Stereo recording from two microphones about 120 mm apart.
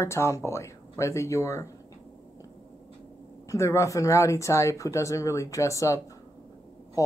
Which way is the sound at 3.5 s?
25° left (ahead or behind).